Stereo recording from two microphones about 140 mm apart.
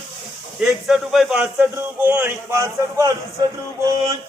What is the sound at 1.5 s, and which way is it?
A man's voice, 15° right (ahead or behind).